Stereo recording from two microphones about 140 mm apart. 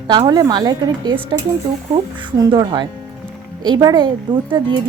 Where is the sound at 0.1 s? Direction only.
30° right (ahead or behind).